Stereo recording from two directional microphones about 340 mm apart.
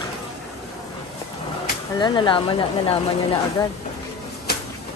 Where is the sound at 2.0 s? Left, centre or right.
Centre.